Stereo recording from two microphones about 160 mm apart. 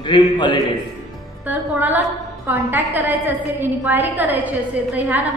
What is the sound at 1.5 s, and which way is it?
A woman's voice, 10° right (ahead or behind).